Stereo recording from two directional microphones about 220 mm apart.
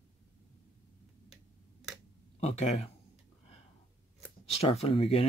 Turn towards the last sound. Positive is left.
turn(degrees=25)  # may be behind; listen again after turning